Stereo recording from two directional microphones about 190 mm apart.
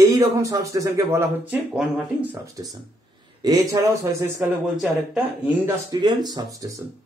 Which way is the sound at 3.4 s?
20° right (ahead or behind).